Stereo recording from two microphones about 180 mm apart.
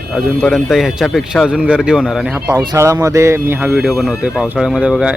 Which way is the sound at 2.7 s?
20° right (ahead or behind).